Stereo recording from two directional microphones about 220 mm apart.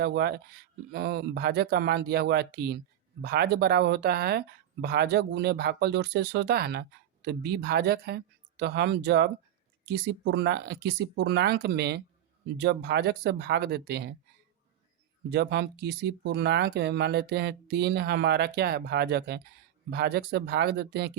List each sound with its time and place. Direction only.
0.0 s speech: 50° right (ahead or behind)
15.3 s speech: 50° right (ahead or behind)